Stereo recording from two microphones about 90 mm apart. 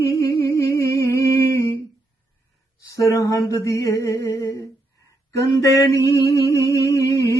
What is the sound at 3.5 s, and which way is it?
Mantra, 35° left (ahead or behind).